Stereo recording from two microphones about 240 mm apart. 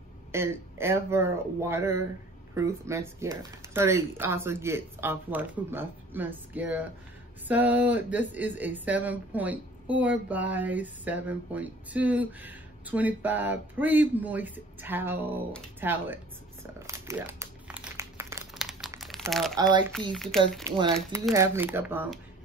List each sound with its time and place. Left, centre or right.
0.3 s speech: centre
16.8 s crumpling: centre
18.6 s a sound: centre
18.9 s crumpling: centre
19.3 s speech: centre
20.6 s speech: centre